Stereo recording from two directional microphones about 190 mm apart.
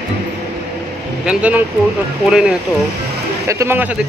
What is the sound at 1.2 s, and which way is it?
Speech, 5° right (ahead or behind).